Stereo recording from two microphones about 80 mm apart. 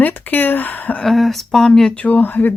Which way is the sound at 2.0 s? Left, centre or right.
Left.